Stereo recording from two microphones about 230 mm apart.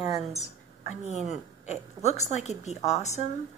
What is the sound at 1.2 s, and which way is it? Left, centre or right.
A woman's voice, left.